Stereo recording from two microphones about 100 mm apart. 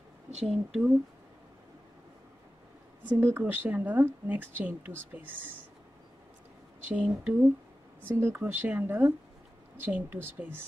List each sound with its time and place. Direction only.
0.5 s speech: 5° right (ahead or behind)
3.0 s speech: 20° right (ahead or behind)
6.9 s speech: 15° right (ahead or behind)